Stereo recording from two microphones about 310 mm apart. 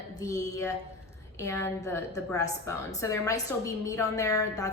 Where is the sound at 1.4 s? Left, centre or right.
Centre.